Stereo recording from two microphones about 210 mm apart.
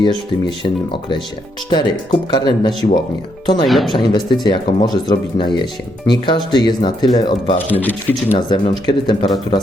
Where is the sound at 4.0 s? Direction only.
20° left (ahead or behind).